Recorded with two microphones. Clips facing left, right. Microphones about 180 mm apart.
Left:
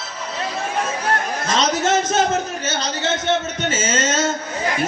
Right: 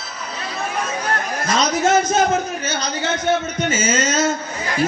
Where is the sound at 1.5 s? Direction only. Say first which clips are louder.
Right 2 dB; 25° left (ahead or behind).